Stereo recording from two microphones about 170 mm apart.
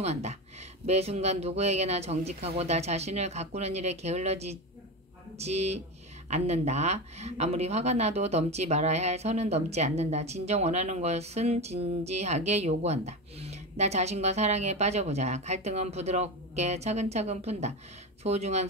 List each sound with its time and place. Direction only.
0.0 s speech: 40° right (ahead or behind)